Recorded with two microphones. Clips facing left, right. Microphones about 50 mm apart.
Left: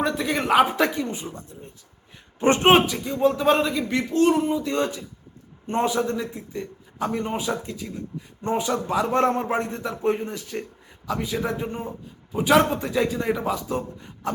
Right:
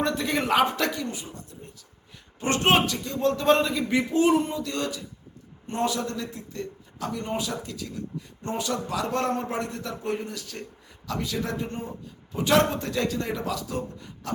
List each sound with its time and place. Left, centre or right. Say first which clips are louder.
0.0 s a man's voice: left 2 dB; centre
0.8 s a man's voice: left 5 dB; left; by 3.8 s centre
3.8 s a man's voice: left 1 dB; centre
4.4 s a man's voice: left 3 dB; centre
4.6 s a man's voice: left 5 dB; left
7.0 s a man's voice: left 4 dB; left